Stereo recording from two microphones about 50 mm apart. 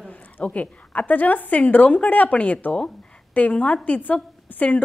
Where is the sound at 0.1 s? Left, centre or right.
Left.